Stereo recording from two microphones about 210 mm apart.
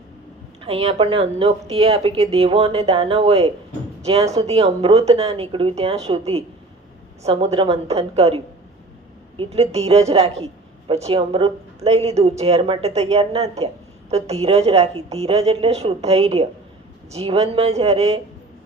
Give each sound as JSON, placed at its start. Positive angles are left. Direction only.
{"t": 0.6, "sound": "speech", "side_deg": -30}
{"t": 9.4, "sound": "speech", "side_deg": -30}